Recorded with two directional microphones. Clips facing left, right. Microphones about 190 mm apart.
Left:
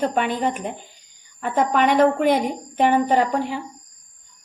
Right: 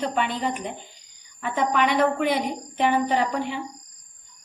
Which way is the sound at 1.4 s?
45° left (ahead or behind).